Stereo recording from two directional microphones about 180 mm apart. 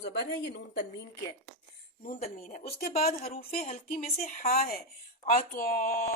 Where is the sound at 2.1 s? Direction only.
45° left (ahead or behind).